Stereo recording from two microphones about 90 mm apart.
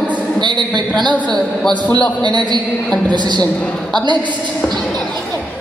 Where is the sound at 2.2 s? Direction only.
55° right (ahead or behind).